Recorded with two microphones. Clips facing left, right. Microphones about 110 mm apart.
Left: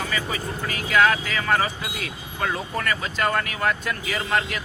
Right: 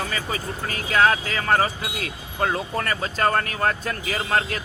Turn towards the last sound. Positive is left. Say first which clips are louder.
# right 1 dB
turn(degrees=-35)  # may be behind; listen again after turning